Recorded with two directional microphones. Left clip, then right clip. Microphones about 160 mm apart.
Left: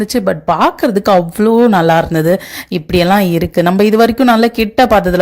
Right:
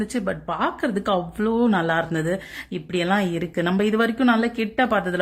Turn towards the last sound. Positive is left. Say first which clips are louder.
# left 12 dB
turn(degrees=35)  # may be behind; listen again after turning